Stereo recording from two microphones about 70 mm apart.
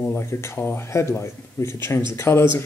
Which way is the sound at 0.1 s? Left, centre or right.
Left.